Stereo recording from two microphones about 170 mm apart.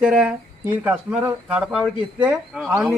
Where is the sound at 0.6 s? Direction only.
10° right (ahead or behind).